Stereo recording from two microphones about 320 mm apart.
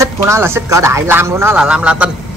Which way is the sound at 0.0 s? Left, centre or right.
Centre.